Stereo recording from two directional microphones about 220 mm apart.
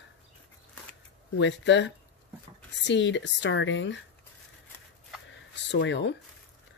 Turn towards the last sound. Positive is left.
turn(degrees=55)  # may be behind; listen again after turning